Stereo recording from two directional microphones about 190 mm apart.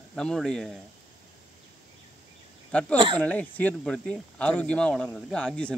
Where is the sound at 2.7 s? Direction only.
5° left (ahead or behind).